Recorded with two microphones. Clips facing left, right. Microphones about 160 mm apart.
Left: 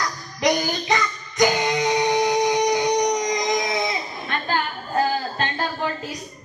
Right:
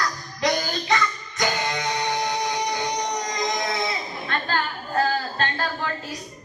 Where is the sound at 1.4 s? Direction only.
20° left (ahead or behind).